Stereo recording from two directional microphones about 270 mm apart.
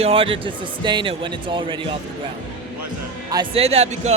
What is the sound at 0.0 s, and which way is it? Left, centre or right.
A man's voice, centre.